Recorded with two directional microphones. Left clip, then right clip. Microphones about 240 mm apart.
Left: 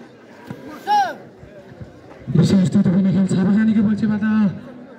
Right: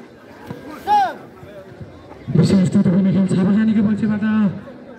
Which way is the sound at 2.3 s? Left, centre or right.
Centre.